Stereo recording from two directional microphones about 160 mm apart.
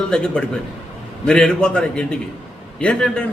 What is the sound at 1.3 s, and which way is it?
A man's voice, 5° left (ahead or behind).